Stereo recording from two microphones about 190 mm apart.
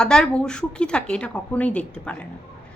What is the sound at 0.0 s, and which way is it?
A woman's voice, 5° left (ahead or behind).